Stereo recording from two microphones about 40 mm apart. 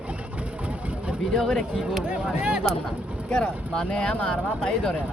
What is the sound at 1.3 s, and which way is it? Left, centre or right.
Speech, centre.